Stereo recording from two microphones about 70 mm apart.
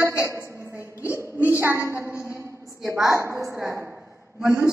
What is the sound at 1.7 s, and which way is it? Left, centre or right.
A woman's voice, right.